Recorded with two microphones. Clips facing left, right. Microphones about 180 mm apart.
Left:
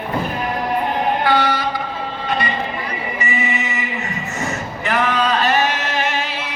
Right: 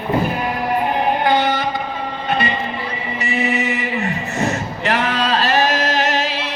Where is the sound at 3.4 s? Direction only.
35° right (ahead or behind).